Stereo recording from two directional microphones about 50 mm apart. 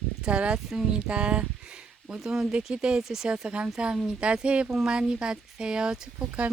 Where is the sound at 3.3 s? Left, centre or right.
Right.